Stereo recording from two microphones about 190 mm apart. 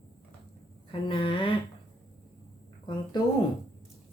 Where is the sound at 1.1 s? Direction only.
30° left (ahead or behind).